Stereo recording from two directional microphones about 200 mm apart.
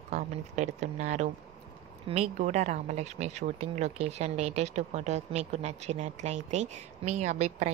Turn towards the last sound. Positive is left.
turn(degrees=-35)  # may be behind; listen again after turning